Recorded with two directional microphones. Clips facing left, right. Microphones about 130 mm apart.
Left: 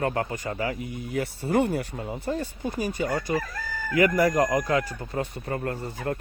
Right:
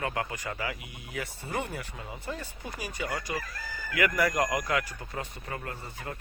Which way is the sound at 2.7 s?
30° left (ahead or behind).